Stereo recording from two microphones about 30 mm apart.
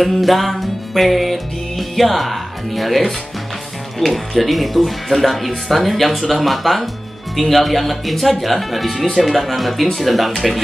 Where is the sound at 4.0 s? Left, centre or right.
Centre.